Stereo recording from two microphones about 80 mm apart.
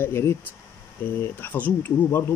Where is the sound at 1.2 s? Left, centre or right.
Left.